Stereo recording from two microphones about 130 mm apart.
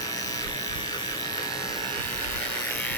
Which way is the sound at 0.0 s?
30° left (ahead or behind).